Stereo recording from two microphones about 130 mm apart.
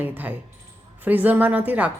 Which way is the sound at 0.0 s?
15° right (ahead or behind).